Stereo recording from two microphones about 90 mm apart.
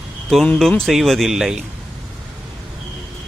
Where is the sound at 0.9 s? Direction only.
Centre (ahead or behind).